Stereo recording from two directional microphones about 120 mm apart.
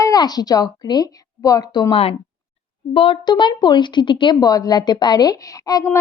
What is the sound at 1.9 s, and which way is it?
Speech, 55° left (ahead or behind).